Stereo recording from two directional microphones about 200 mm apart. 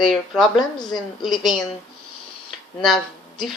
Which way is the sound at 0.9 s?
Centre (ahead or behind).